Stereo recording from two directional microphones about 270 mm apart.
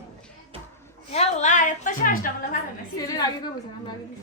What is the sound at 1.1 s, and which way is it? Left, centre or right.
A woman's voice, left.